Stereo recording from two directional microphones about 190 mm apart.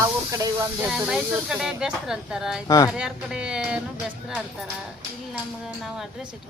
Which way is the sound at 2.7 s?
15° left (ahead or behind).